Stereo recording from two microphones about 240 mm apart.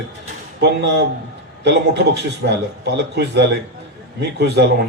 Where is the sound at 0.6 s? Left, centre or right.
Right.